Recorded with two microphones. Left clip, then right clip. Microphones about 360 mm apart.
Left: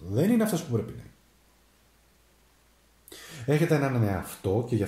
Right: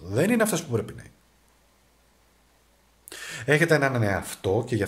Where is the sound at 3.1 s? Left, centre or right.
Right.